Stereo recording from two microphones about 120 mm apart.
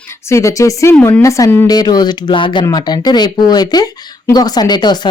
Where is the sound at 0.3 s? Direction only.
25° left (ahead or behind).